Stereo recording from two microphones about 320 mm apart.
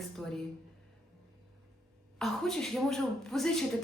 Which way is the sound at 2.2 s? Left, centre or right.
Centre.